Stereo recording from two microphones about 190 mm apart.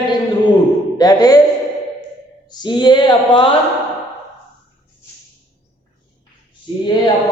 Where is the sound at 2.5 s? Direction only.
25° left (ahead or behind).